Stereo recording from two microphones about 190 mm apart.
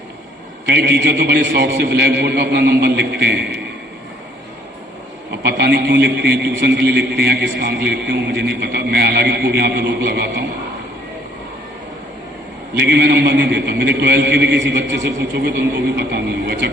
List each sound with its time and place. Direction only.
0.6 s a man's voice: 60° right (ahead or behind)
5.4 s a man's voice: 60° right (ahead or behind)
12.7 s a man's voice: 60° right (ahead or behind)